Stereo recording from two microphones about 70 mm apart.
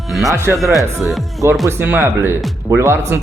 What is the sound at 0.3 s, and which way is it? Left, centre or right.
Speech, right.